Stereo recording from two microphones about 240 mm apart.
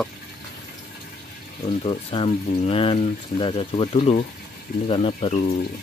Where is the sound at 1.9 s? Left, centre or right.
Left.